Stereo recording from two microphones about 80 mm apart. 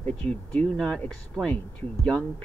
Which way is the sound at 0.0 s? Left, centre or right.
Centre.